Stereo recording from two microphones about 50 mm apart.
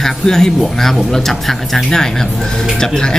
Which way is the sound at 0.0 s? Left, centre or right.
Centre.